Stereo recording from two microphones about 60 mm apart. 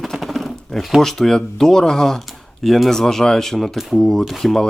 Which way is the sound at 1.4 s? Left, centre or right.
Centre.